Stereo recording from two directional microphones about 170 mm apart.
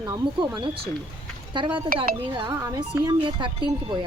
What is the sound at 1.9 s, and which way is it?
Speech, 60° right (ahead or behind).